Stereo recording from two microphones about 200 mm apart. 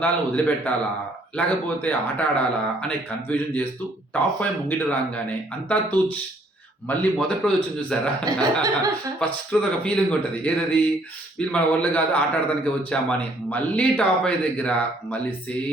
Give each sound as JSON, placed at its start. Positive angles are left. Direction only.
{"t": 0.0, "sound": "a man's voice", "side_deg": 10}
{"t": 8.2, "sound": "speech", "side_deg": -20}
{"t": 9.1, "sound": "a man's voice", "side_deg": 5}